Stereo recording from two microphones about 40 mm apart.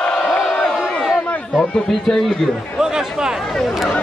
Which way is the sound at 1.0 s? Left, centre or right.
Centre.